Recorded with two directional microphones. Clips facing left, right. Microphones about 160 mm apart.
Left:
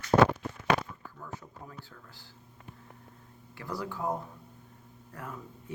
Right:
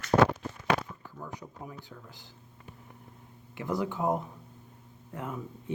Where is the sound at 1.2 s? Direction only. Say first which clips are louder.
Right 3 dB; 15° right (ahead or behind).